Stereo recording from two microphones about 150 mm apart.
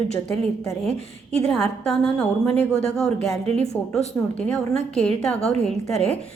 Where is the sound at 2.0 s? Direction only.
5° left (ahead or behind).